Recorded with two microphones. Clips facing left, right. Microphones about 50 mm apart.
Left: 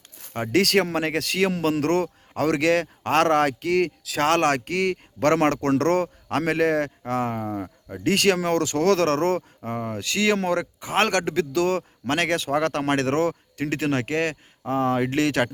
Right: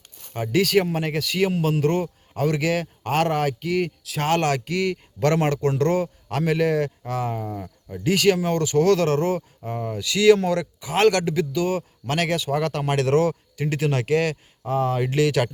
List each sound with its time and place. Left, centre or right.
0.3 s a man's voice: left
4.4 s a man's voice: left
7.4 s speech: left
8.0 s a man's voice: left
9.6 s a man's voice: left
11.5 s a man's voice: left
11.8 s a man's voice: left